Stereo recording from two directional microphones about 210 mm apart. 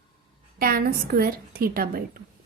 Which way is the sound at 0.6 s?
45° right (ahead or behind).